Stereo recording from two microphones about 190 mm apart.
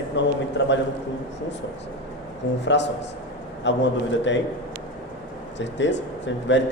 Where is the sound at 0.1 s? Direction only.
70° left (ahead or behind).